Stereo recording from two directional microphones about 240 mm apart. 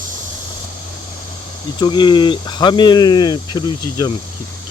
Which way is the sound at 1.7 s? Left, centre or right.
Centre.